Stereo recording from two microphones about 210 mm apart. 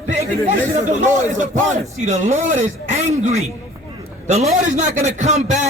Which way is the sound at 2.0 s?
35° right (ahead or behind).